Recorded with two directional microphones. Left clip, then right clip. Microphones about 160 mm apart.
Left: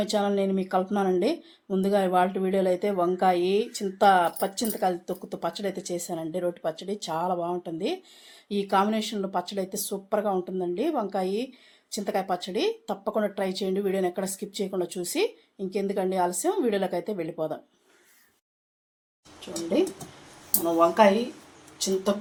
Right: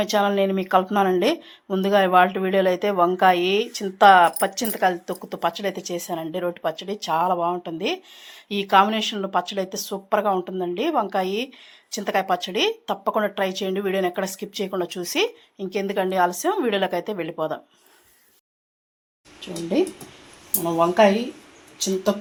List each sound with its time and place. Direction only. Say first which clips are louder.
0.0 s speech: right 5 dB; centre (ahead or behind)
20.7 s speech: right 3 dB; 45° right (ahead or behind)